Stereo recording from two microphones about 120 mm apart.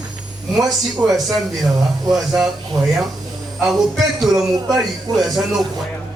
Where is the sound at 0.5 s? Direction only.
Centre (ahead or behind).